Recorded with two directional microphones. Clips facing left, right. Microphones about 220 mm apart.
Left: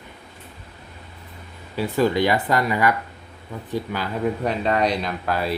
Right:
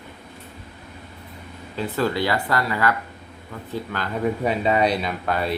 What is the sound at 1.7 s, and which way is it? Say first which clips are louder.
Speech: left 3 dB; 15° left (ahead or behind).